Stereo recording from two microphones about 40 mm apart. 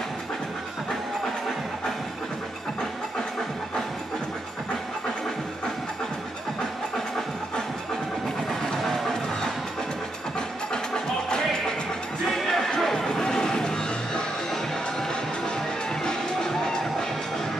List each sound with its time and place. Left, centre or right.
8.5 s music: centre
11.2 s music: left